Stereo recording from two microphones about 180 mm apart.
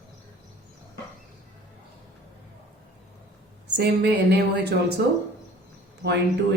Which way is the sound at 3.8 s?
65° right (ahead or behind).